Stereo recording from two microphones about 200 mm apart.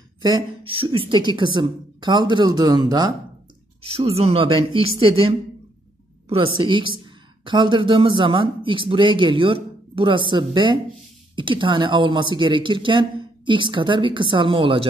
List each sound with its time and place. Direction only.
0.2 s speech: 25° right (ahead or behind)
6.5 s speech: 25° right (ahead or behind)